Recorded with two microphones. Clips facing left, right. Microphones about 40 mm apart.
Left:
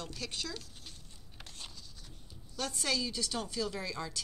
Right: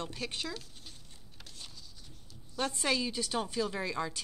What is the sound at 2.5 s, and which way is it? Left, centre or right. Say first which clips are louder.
Speech: right 3 dB; right.